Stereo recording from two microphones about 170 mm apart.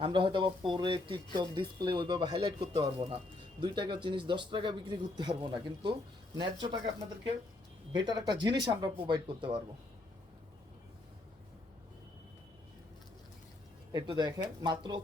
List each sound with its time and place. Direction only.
0.0 s speech: 30° right (ahead or behind)
8.0 s speech: 25° right (ahead or behind)
13.9 s speech: 25° right (ahead or behind)